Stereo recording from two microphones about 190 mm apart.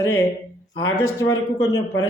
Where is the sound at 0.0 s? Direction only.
15° left (ahead or behind).